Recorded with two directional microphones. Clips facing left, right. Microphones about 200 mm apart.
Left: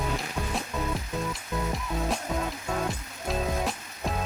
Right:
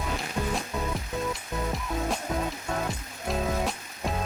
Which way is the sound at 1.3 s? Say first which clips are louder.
Even; centre (ahead or behind).